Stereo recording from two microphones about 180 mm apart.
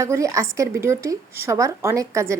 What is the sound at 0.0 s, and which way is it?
A woman's voice, 15° right (ahead or behind).